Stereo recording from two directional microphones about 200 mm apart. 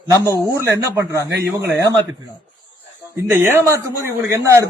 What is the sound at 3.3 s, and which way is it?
A man's voice, 10° right (ahead or behind).